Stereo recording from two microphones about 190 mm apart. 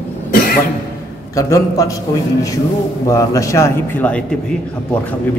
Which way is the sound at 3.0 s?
15° left (ahead or behind).